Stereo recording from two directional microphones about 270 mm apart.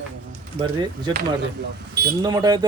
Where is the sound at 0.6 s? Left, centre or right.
Centre.